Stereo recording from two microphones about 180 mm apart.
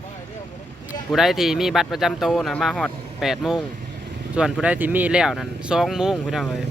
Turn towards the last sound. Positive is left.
turn(degrees=0)  # may be behind; listen again after turning